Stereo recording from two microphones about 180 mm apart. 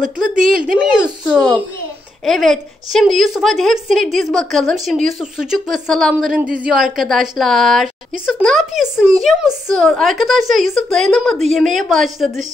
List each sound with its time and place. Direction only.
0.4 s speech: 50° right (ahead or behind)
0.9 s speech: 5° right (ahead or behind)